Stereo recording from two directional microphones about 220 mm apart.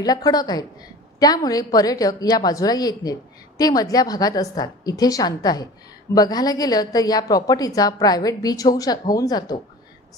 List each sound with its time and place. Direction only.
0.0 s a woman's voice: 15° left (ahead or behind)